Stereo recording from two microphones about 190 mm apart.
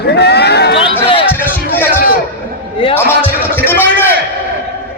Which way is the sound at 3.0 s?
10° left (ahead or behind).